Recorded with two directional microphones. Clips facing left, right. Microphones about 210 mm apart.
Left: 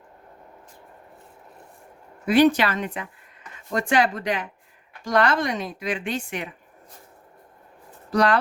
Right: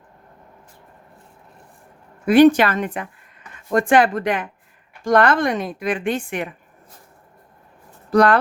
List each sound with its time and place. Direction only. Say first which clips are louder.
2.2 s speech: right 6 dB; 50° right (ahead or behind)
8.1 s speech: right 5 dB; 55° right (ahead or behind)